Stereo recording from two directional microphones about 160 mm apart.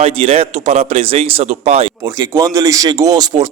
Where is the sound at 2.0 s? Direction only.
20° right (ahead or behind).